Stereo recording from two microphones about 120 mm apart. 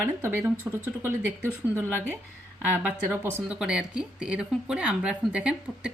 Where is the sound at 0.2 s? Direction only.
20° right (ahead or behind).